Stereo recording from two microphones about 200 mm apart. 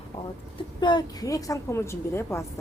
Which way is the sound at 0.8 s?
20° left (ahead or behind).